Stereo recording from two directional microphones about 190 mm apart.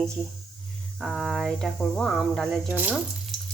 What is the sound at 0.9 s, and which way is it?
Speech, centre (ahead or behind).